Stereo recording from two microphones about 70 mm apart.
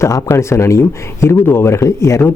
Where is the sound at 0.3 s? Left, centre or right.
Left.